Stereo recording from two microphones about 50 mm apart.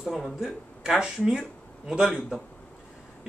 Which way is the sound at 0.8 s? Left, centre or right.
Centre.